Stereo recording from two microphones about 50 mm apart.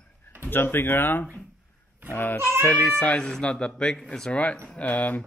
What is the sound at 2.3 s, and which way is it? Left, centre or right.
Speech, right.